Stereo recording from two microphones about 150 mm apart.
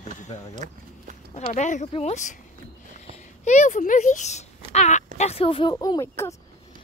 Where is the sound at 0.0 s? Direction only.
50° left (ahead or behind).